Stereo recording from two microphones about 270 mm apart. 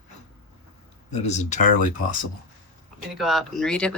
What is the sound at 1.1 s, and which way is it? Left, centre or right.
Speech, left.